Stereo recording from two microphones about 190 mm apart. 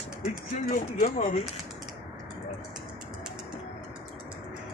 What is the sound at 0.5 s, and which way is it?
Speech, 45° left (ahead or behind).